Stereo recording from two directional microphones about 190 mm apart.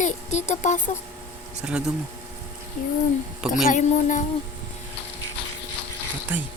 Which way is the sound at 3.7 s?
40° left (ahead or behind).